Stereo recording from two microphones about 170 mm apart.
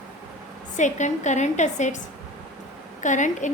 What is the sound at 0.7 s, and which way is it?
A woman's voice, 45° left (ahead or behind).